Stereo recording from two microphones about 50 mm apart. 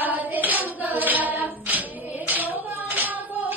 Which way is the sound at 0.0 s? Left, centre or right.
Right.